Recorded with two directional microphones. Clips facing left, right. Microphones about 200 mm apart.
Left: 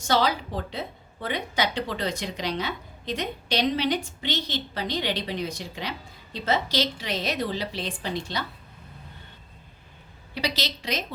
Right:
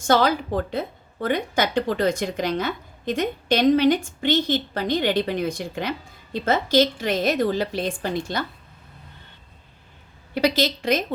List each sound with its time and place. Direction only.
0.1 s a woman's voice: 50° right (ahead or behind)
10.3 s a woman's voice: 50° right (ahead or behind)